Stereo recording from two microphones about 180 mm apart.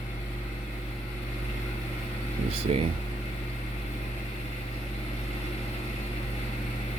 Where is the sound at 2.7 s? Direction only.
35° right (ahead or behind).